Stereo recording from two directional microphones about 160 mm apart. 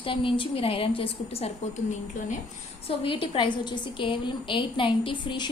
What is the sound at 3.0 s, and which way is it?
A woman's voice, 35° left (ahead or behind).